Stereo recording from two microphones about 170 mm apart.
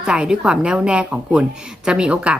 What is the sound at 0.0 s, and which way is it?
Speech, 5° right (ahead or behind).